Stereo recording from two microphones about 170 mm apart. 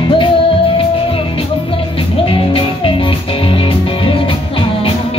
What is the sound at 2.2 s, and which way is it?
Music, 30° left (ahead or behind).